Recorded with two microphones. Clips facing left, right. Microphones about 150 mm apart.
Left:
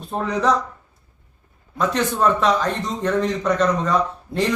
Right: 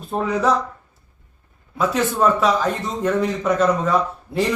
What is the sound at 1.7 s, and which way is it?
Speech, 5° right (ahead or behind).